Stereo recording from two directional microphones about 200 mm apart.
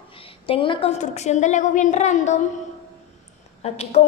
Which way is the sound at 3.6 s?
30° left (ahead or behind).